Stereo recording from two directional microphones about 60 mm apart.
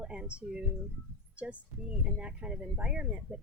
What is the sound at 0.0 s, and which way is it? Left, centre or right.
A woman's voice, centre.